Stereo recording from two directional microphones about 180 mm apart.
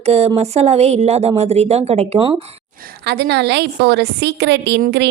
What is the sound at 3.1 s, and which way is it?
A woman's voice, 65° right (ahead or behind).